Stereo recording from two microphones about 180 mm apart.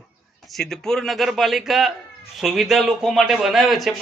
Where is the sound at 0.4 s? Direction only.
Centre (ahead or behind).